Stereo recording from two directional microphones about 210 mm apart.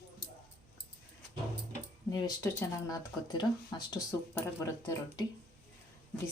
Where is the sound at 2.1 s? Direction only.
15° left (ahead or behind).